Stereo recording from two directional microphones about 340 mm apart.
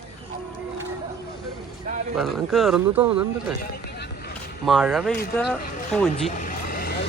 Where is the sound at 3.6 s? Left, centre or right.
Left.